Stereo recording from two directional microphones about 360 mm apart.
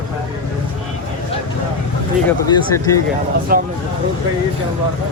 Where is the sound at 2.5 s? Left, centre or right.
Centre.